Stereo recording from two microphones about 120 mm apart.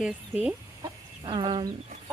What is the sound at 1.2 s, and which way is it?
Speech, 45° right (ahead or behind).